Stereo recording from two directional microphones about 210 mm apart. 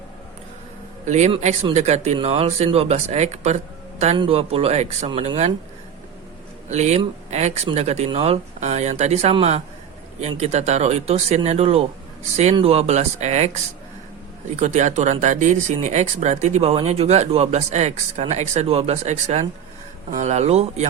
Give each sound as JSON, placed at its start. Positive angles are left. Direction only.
{"t": 1.0, "sound": "speech", "side_deg": -35}
{"t": 6.7, "sound": "speech", "side_deg": -35}